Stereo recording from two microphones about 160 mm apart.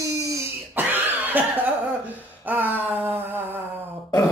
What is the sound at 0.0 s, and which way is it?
Cough, 15° right (ahead or behind).